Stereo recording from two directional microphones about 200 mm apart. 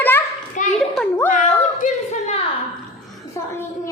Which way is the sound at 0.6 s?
40° left (ahead or behind).